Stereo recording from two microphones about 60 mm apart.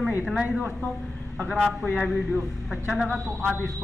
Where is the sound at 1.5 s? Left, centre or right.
Centre.